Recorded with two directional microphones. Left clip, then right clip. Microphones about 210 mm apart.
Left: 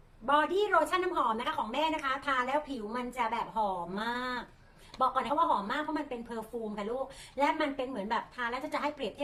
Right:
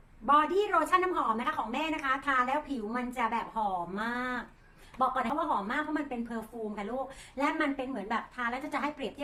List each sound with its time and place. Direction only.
0.3 s a woman's voice: centre (ahead or behind)